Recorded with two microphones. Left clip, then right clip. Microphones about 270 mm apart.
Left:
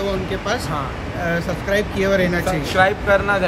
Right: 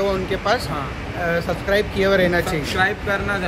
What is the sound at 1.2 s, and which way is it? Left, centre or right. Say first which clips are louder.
Speech: right 1 dB; centre.